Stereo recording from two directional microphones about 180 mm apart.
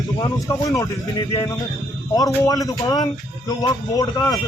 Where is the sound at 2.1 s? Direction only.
15° left (ahead or behind).